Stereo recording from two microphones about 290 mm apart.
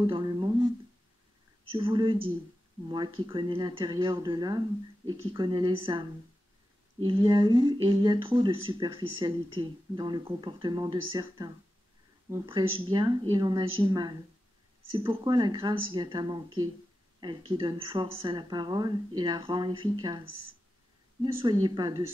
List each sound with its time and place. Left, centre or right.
0.0 s a sound: centre
1.7 s speech: centre
3.2 s speech: centre